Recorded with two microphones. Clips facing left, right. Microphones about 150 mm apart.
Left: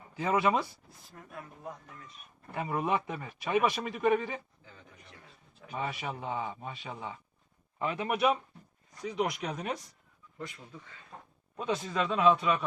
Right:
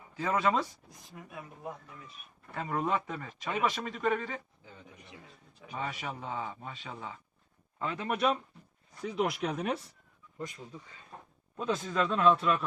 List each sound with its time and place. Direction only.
0.2 s a man's voice: 10° left (ahead or behind)
1.1 s speech: 10° right (ahead or behind)
2.5 s a man's voice: 15° left (ahead or behind)
5.7 s a man's voice: 15° left (ahead or behind)
9.0 s speech: 5° right (ahead or behind)
11.5 s speech: 5° left (ahead or behind)